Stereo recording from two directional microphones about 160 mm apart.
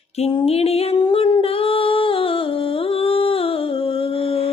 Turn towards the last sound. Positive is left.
turn(degrees=35)  # may be behind; listen again after turning